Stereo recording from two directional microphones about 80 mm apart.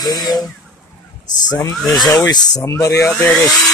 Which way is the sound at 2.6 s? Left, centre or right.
Left.